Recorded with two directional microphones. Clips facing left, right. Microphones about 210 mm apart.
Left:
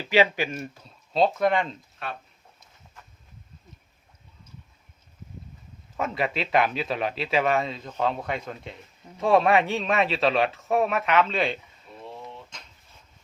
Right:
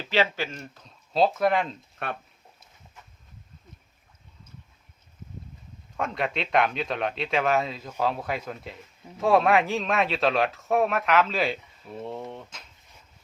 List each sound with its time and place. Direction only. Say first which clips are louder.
0.0 s speech: left 4 dB; 15° left (ahead or behind)
1.1 s speech: even; centre (ahead or behind)
2.0 s speech: right 2 dB; 55° right (ahead or behind)
6.0 s speech: left 1 dB; 5° left (ahead or behind)
12.1 s speech: right 5 dB; 55° right (ahead or behind)